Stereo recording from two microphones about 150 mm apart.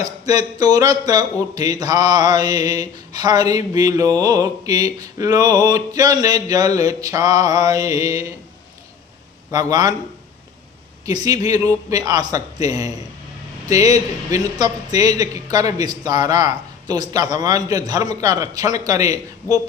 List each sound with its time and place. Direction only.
0.0 s a man's voice: 25° right (ahead or behind)
9.5 s a man's voice: 25° right (ahead or behind)
11.0 s a man's voice: 25° right (ahead or behind)